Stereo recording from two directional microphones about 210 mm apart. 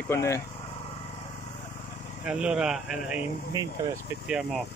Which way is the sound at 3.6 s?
15° right (ahead or behind).